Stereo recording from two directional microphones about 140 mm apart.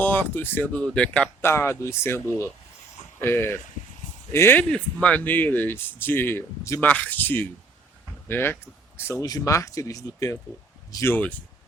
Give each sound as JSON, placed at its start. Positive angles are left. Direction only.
{"t": 0.0, "sound": "speech", "side_deg": 10}